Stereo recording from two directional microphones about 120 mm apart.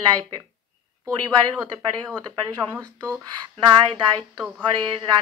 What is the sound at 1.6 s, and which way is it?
Speech, 5° left (ahead or behind).